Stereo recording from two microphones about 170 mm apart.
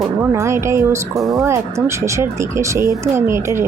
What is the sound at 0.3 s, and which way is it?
Speech, 15° right (ahead or behind).